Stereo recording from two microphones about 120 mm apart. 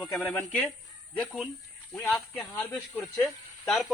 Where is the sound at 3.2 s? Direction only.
Centre (ahead or behind).